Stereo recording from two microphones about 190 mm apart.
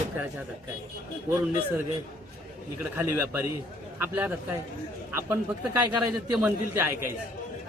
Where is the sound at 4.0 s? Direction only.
10° right (ahead or behind).